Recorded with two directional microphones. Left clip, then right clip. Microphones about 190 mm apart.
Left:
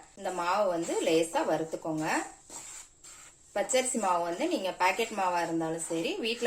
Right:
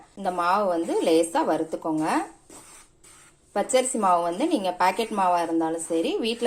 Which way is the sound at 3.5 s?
35° right (ahead or behind).